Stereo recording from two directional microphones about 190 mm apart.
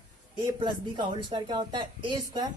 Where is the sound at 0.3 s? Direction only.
25° right (ahead or behind).